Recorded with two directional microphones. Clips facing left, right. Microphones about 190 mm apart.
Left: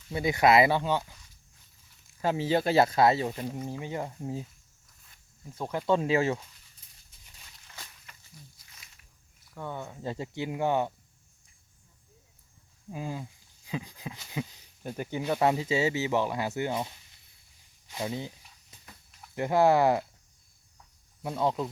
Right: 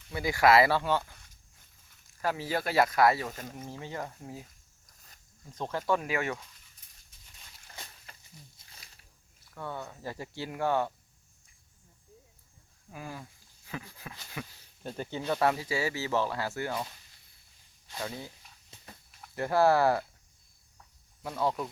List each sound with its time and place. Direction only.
0.1 s speech: 25° left (ahead or behind)
2.2 s speech: 25° left (ahead or behind)
5.5 s speech: 15° left (ahead or behind)
8.1 s a sound: 30° right (ahead or behind)
9.6 s speech: 15° left (ahead or behind)
12.9 s speech: 20° left (ahead or behind)
17.9 s speech: 20° left (ahead or behind)
19.4 s speech: 20° left (ahead or behind)
21.2 s speech: 20° left (ahead or behind)